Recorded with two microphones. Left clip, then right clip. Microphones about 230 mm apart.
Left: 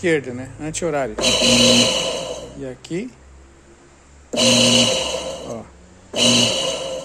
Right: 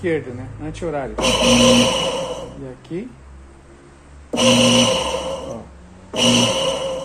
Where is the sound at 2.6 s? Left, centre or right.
Left.